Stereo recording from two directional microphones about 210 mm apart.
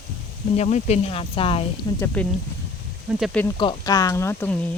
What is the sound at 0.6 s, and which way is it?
Speech, 30° left (ahead or behind).